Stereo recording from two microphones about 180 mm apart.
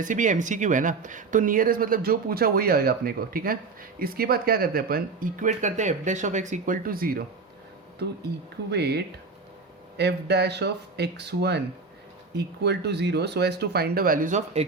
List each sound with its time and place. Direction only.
0.0 s speech: 45° right (ahead or behind)
8.7 s speech: 65° right (ahead or behind); by 14.6 s 45° right (ahead or behind)